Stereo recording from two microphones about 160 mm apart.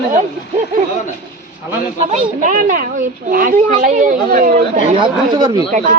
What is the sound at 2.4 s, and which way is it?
A child's voice, 55° right (ahead or behind).